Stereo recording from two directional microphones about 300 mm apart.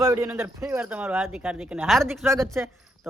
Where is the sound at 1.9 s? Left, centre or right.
Centre.